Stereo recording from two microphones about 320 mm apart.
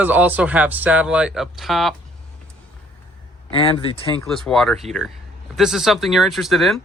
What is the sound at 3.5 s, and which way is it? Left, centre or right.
Speech, centre.